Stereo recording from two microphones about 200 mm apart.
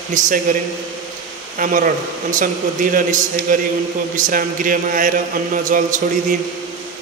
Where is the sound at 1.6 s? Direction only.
40° right (ahead or behind).